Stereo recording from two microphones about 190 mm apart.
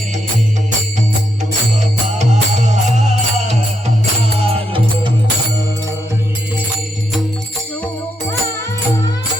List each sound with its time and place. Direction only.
1.8 s music: 40° right (ahead or behind)